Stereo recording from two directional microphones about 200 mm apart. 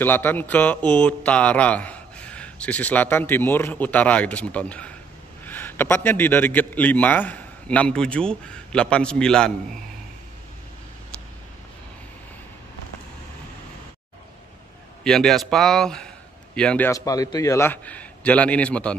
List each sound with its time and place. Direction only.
0.0 s speech: 10° left (ahead or behind)
15.0 s speech: centre (ahead or behind)